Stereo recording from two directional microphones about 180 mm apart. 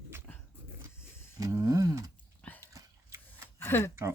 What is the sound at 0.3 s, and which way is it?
Dog, 10° left (ahead or behind).